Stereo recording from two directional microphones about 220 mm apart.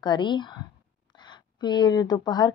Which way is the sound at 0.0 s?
20° left (ahead or behind).